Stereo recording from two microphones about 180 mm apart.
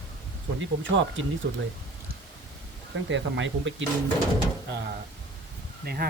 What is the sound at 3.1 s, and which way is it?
Speech, 90° right.